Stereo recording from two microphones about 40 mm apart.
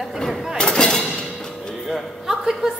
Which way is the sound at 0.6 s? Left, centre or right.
Centre.